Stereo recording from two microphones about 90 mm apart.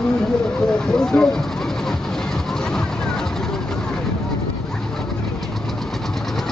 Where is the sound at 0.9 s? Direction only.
5° left (ahead or behind).